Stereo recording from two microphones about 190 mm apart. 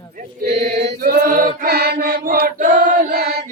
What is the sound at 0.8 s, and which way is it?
Choir, 55° right (ahead or behind).